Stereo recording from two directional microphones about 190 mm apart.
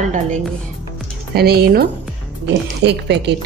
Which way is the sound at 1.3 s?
55° right (ahead or behind).